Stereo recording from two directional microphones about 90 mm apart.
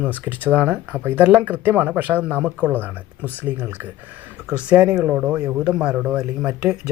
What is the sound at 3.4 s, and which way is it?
Speech, 20° right (ahead or behind).